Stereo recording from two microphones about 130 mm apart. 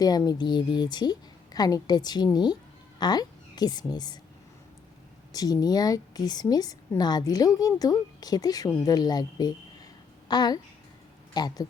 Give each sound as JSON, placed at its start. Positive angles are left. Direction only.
{"t": 0.0, "sound": "a woman's voice", "side_deg": 30}
{"t": 5.3, "sound": "a woman's voice", "side_deg": 30}